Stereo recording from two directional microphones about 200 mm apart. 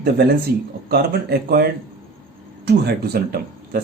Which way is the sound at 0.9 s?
50° right (ahead or behind).